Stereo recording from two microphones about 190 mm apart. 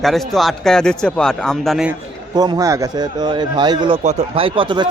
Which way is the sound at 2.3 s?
20° right (ahead or behind).